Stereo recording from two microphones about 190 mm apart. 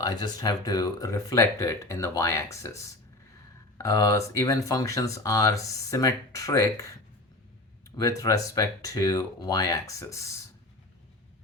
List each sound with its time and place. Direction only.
0.0 s speech: 20° left (ahead or behind)
3.8 s speech: 15° left (ahead or behind)
7.9 s speech: 15° left (ahead or behind)